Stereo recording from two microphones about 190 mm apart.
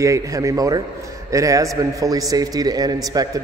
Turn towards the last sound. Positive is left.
turn(degrees=-20)  # may be behind; listen again after turning